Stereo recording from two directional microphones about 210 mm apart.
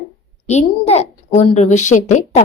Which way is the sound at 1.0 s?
30° left (ahead or behind).